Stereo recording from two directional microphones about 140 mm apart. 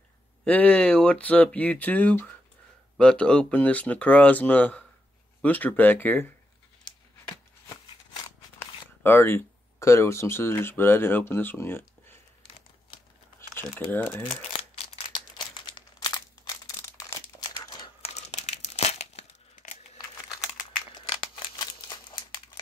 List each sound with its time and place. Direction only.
0.5 s speech: 10° left (ahead or behind)
8.5 s speech: 15° left (ahead or behind)
13.4 s speech: 15° left (ahead or behind)
15.0 s crumpling: 35° left (ahead or behind)
18.0 s crumpling: 55° left (ahead or behind)
20.0 s crumpling: 25° left (ahead or behind)